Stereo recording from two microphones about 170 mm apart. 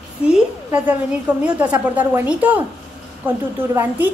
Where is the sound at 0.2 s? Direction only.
5° right (ahead or behind).